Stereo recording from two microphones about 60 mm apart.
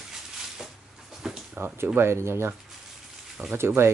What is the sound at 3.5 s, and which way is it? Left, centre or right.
Speech, right.